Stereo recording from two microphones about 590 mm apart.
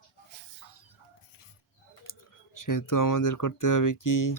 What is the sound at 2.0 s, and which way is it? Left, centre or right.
Speech, left.